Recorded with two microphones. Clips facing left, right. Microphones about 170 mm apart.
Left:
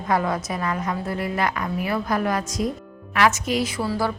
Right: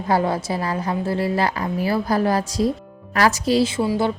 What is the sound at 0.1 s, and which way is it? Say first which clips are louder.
A woman's voice: right 3 dB; 30° right (ahead or behind).